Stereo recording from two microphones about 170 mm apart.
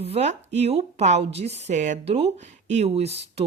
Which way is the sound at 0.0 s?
40° right (ahead or behind).